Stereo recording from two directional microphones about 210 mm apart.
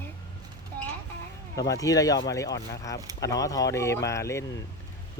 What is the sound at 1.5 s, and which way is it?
Speech, 15° left (ahead or behind).